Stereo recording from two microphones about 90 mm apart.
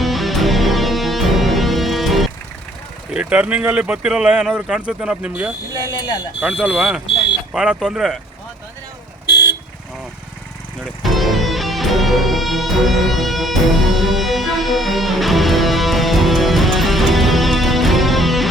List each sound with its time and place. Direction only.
0.0 s music: centre (ahead or behind)
3.1 s speech: 10° right (ahead or behind)
5.8 s speech: 45° left (ahead or behind)
6.4 s speech: 10° right (ahead or behind)
11.0 s music: centre (ahead or behind)